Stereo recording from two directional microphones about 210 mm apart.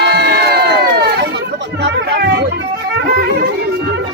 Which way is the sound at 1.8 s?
55° right (ahead or behind).